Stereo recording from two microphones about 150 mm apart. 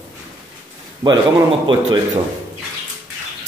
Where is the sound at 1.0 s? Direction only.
30° right (ahead or behind).